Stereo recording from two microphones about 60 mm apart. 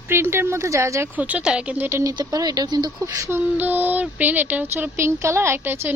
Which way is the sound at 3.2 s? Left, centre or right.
Right.